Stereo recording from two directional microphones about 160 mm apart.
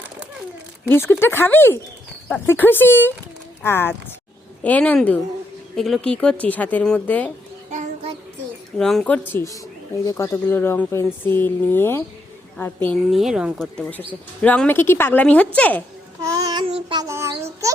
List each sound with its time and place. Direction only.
0.9 s speech: 15° left (ahead or behind)
7.7 s child singing: 50° right (ahead or behind)
8.8 s speech: 5° left (ahead or behind)
13.1 s speech: centre (ahead or behind)
13.8 s speech: 10° left (ahead or behind)
16.2 s child singing: 20° right (ahead or behind)
17.1 s child singing: 15° right (ahead or behind)